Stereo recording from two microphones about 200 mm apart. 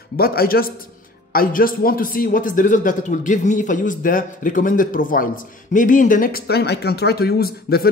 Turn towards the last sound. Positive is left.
turn(degrees=50)  # may be behind; listen again after turning